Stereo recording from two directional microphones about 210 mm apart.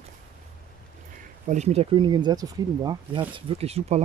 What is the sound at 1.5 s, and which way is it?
Speech, 30° right (ahead or behind).